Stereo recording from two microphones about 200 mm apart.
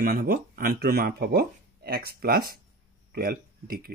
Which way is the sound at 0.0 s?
45° right (ahead or behind).